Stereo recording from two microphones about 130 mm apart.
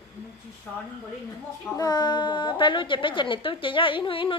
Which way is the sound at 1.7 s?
30° left (ahead or behind).